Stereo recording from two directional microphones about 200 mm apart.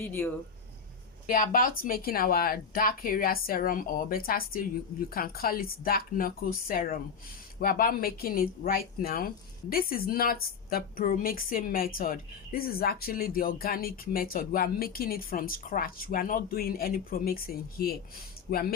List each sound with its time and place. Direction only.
1.3 s speech: 45° left (ahead or behind)